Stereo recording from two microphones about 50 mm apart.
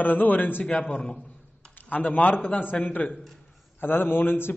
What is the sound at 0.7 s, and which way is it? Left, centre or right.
A man's voice, left.